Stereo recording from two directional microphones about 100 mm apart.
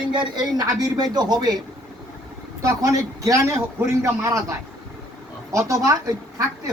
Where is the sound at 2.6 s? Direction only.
35° right (ahead or behind).